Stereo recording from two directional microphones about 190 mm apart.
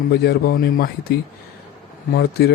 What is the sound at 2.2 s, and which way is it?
Speech, 60° left (ahead or behind).